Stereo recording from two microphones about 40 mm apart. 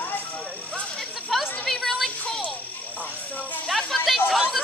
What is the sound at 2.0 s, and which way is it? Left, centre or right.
Music, left.